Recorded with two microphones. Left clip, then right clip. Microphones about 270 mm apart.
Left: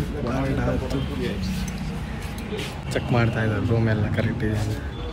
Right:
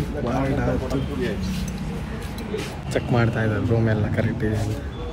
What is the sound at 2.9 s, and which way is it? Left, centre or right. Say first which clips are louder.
Speech: right 1 dB; centre.